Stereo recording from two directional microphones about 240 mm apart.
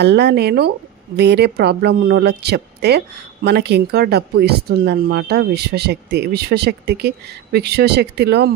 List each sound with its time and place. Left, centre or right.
0.0 s speech: right